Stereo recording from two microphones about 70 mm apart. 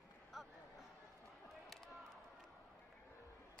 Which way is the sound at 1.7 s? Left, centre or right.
Centre.